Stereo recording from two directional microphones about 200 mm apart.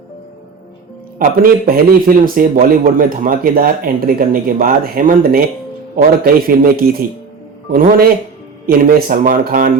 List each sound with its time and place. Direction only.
1.2 s a man's voice: 45° right (ahead or behind)